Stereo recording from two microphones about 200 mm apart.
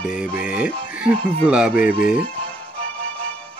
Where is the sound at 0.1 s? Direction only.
5° right (ahead or behind).